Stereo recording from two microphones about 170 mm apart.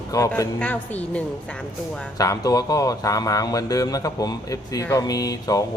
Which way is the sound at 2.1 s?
20° left (ahead or behind).